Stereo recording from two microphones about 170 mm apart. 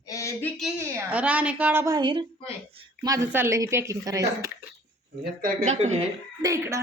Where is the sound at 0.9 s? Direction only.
10° right (ahead or behind).